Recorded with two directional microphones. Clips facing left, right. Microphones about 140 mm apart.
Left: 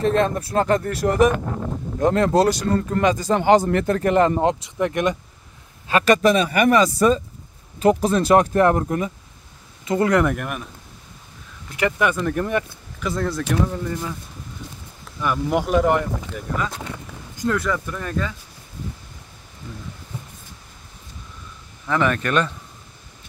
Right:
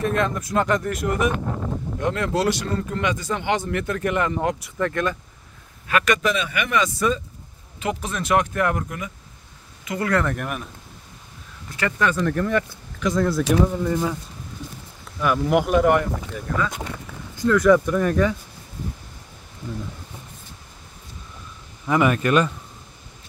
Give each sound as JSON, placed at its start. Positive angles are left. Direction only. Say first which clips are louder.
{"t": 0.0, "sound": "speech", "louder": "left 4 dB", "side_deg": 30}
{"t": 4.4, "sound": "speech", "louder": "left 3 dB", "side_deg": 25}
{"t": 5.9, "sound": "speech", "louder": "left 5 dB", "side_deg": 30}
{"t": 9.8, "sound": "speech", "louder": "left 5 dB", "side_deg": 25}
{"t": 10.3, "sound": "speech", "louder": "left 1 dB", "side_deg": 0}
{"t": 11.7, "sound": "speech", "louder": "left 2 dB", "side_deg": 15}
{"t": 13.0, "sound": "speech", "louder": "right 3 dB", "side_deg": 0}
{"t": 15.2, "sound": "speech", "louder": "right 2 dB", "side_deg": 0}
{"t": 16.9, "sound": "a sound", "louder": "right 1 dB", "side_deg": 15}
{"t": 17.7, "sound": "speech", "louder": "right 8 dB", "side_deg": -10}
{"t": 21.8, "sound": "speech", "louder": "right 2 dB", "side_deg": -10}